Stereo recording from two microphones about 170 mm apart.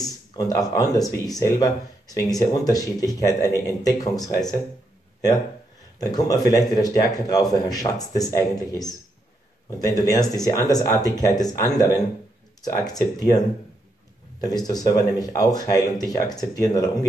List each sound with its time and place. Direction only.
0.0 s speech: 20° left (ahead or behind)
5.9 s speech: 20° left (ahead or behind)
9.8 s speech: 20° left (ahead or behind)
14.4 s speech: 20° left (ahead or behind)